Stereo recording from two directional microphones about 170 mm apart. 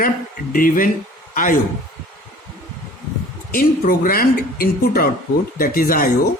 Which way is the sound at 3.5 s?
60° left (ahead or behind).